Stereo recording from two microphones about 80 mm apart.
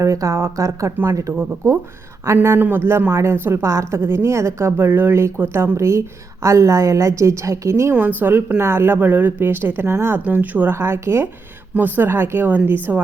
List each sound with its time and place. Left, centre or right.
0.0 s a woman's voice: right
2.6 s a woman's voice: right
7.9 s a woman's voice: right
10.2 s a woman's voice: right